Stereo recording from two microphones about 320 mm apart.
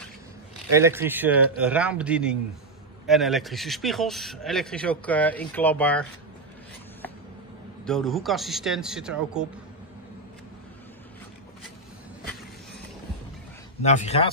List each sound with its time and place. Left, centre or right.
0.7 s speech: centre
7.8 s speech: centre
13.8 s speech: left